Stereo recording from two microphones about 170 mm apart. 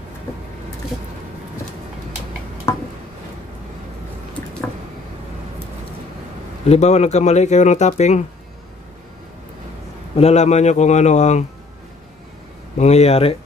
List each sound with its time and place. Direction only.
2.7 s a sound: 15° left (ahead or behind)
6.6 s speech: 40° left (ahead or behind)
10.1 s speech: 40° left (ahead or behind)
12.7 s speech: 40° left (ahead or behind)